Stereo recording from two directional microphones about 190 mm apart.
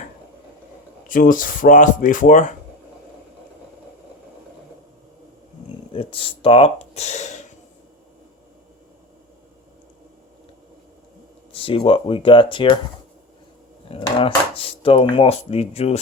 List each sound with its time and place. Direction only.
1.0 s speech: 45° left (ahead or behind)
5.9 s speech: 30° left (ahead or behind)
11.5 s speech: 30° left (ahead or behind)
13.8 s speech: 30° left (ahead or behind)